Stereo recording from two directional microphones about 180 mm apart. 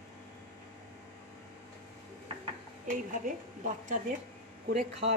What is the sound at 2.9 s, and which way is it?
A woman's voice, 45° right (ahead or behind).